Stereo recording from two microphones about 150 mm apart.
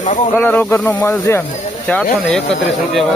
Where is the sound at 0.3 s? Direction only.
10° left (ahead or behind).